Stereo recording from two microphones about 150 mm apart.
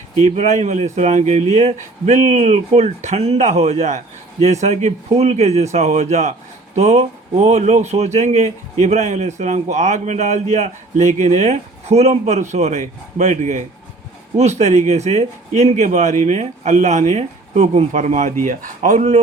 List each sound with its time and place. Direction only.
0.2 s speech: 45° right (ahead or behind)